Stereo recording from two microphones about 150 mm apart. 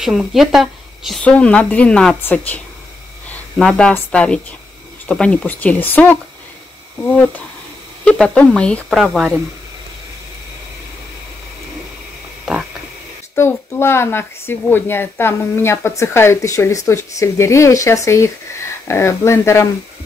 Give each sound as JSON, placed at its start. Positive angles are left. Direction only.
{"t": 0.0, "sound": "speech", "side_deg": 0}
{"t": 1.2, "sound": "speech", "side_deg": 10}
{"t": 8.0, "sound": "speech", "side_deg": 5}
{"t": 13.3, "sound": "speech", "side_deg": 15}